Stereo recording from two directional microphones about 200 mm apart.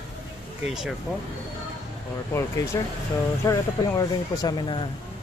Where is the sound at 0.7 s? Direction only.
5° right (ahead or behind).